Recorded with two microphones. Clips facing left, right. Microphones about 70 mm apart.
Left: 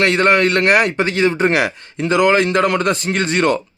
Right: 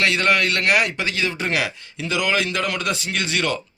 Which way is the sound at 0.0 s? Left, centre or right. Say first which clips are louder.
Left 6 dB; left.